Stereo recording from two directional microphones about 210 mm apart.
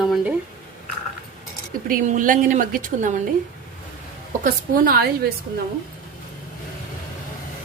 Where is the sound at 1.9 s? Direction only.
40° right (ahead or behind).